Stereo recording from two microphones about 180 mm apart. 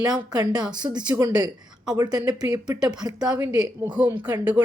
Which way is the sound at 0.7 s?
25° right (ahead or behind).